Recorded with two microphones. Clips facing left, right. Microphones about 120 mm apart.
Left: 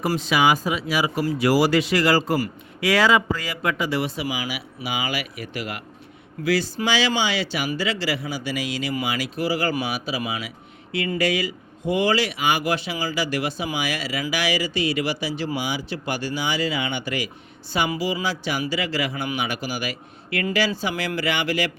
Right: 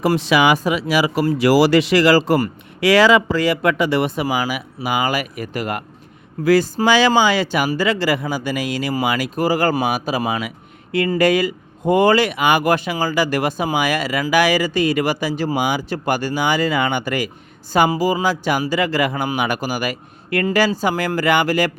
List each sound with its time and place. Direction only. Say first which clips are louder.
0.0 s a man's voice: right 5 dB; 80° right
1.4 s a man's voice: right 5 dB; 85° right; by 21.7 s 45° right (ahead or behind)